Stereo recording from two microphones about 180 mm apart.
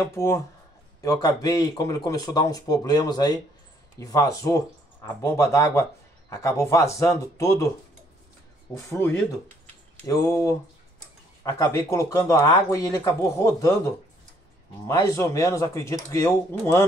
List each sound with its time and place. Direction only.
0.1 s speech: 15° left (ahead or behind)
8.7 s speech: 15° left (ahead or behind)